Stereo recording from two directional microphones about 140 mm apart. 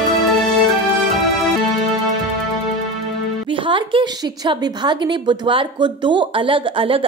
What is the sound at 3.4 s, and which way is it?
A woman's voice, 35° right (ahead or behind).